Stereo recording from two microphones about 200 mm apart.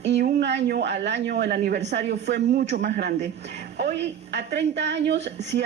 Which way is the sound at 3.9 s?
60° right (ahead or behind).